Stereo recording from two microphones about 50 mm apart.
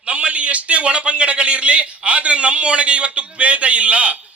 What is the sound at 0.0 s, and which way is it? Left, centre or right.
A man's voice, right.